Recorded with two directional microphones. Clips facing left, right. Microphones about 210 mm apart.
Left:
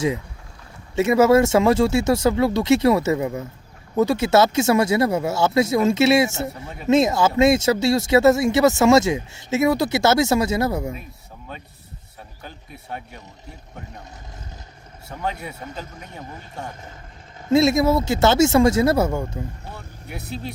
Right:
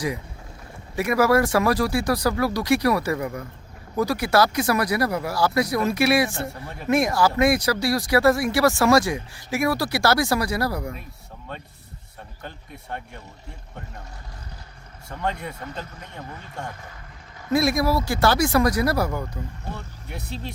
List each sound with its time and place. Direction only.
0.9 s speech: 25° left (ahead or behind)
12.4 s speech: 5° left (ahead or behind)
15.1 s speech: 5° left (ahead or behind)
17.5 s speech: 25° left (ahead or behind)
19.7 s speech: 5° left (ahead or behind)